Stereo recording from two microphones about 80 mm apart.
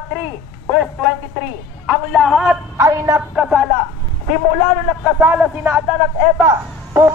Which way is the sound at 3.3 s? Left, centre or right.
Centre.